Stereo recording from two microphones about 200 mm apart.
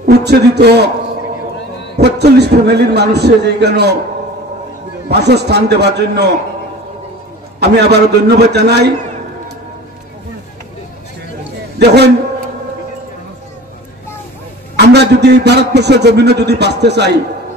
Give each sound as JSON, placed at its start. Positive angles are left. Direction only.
{"t": 0.0, "sound": "a man's voice", "side_deg": -55}
{"t": 2.0, "sound": "a man's voice", "side_deg": -55}
{"t": 5.0, "sound": "a man's voice", "side_deg": -55}
{"t": 7.6, "sound": "a man's voice", "side_deg": -55}
{"t": 11.8, "sound": "a man's voice", "side_deg": -55}
{"t": 14.8, "sound": "a man's voice", "side_deg": -55}